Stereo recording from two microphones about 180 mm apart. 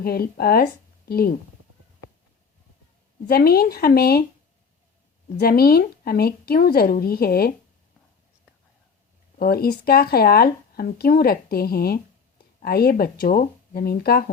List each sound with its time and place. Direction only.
0.0 s speech: 55° left (ahead or behind)
3.2 s speech: 60° left (ahead or behind)
5.4 s speech: 60° left (ahead or behind)
9.4 s speech: 60° left (ahead or behind)